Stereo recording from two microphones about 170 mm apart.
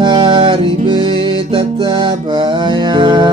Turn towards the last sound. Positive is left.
turn(degrees=-30)  # may be behind; listen again after turning